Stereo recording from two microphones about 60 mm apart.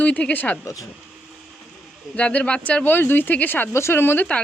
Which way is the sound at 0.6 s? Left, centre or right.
Left.